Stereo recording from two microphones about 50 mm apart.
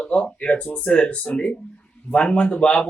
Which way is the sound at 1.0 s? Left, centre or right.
Left.